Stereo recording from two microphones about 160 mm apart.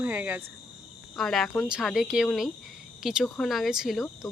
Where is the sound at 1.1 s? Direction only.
Centre (ahead or behind).